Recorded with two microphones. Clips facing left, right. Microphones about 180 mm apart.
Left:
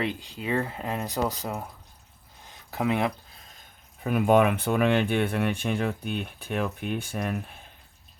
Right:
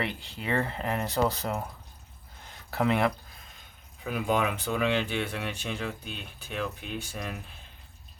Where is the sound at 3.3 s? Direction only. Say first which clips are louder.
Even; 35° left (ahead or behind).